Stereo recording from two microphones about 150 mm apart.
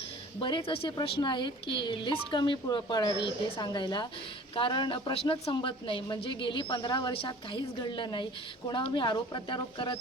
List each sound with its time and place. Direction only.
0.3 s a woman's voice: 35° left (ahead or behind)